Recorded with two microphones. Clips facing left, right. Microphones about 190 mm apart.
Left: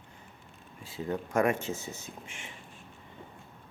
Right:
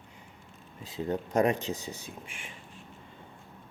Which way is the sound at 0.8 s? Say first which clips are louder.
Right 2 dB; 20° right (ahead or behind).